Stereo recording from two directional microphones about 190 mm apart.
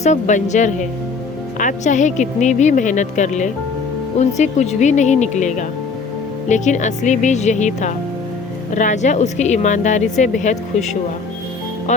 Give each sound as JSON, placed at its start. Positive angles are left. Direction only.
{"t": 0.0, "sound": "speech", "side_deg": 40}
{"t": 11.9, "sound": "music", "side_deg": 40}